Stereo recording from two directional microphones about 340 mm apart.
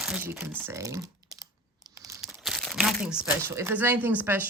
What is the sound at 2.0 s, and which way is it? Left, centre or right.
Crumpling, centre.